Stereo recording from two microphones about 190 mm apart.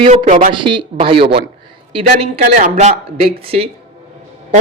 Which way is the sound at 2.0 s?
40° right (ahead or behind).